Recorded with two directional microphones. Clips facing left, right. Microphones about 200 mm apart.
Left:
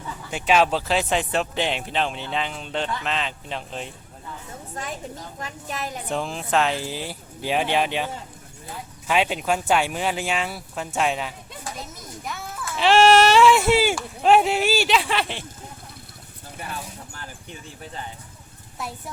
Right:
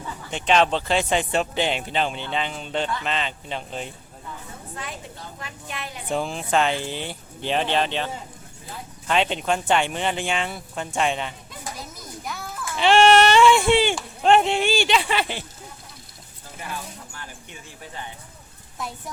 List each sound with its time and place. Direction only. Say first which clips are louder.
0.3 s speech: even; 5° left (ahead or behind)
5.4 s a woman's voice: left 5 dB; 40° left (ahead or behind)
6.1 s speech: right 2 dB; centre (ahead or behind)